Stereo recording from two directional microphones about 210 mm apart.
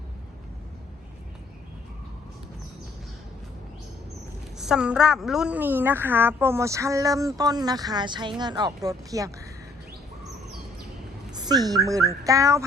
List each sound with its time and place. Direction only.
4.5 s a woman's voice: 5° right (ahead or behind)
11.3 s a woman's voice: 20° right (ahead or behind)